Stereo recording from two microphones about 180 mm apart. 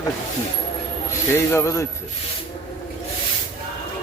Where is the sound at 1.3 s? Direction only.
15° left (ahead or behind).